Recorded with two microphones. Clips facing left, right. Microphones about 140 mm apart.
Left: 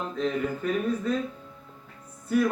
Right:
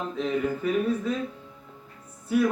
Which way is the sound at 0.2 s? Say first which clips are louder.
Right 1 dB; 5° right (ahead or behind).